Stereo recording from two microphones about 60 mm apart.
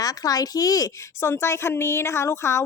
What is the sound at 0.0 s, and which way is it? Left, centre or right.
Speech, left.